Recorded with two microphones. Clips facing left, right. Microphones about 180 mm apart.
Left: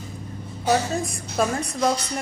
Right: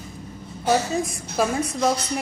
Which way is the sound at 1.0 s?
Centre (ahead or behind).